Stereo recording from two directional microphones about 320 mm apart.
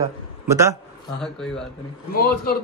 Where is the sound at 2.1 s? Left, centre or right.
Left.